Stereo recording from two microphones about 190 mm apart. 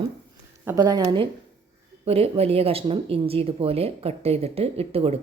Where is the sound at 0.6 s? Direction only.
15° right (ahead or behind).